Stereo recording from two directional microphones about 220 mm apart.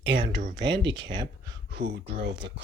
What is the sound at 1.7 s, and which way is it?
Speech, 50° right (ahead or behind).